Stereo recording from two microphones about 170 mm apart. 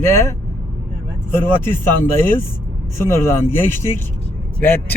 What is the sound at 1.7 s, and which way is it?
Speech, 10° left (ahead or behind).